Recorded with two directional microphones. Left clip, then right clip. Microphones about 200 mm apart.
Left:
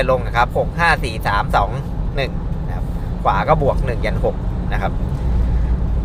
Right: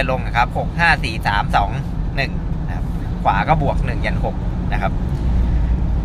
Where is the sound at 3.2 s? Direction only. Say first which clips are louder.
Left 1 dB; 10° left (ahead or behind).